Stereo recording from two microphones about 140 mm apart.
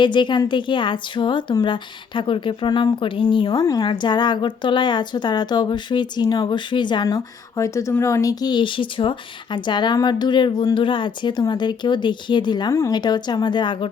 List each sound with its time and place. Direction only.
0.0 s a woman's voice: 35° left (ahead or behind)